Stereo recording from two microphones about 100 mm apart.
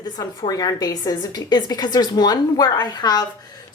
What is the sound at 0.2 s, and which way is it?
Speech, 40° left (ahead or behind).